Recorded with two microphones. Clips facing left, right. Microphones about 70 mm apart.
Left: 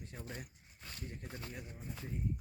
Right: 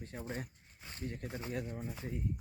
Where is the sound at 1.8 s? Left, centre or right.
Centre.